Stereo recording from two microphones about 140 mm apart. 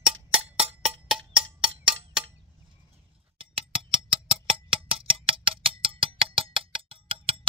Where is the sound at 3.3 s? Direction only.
40° right (ahead or behind).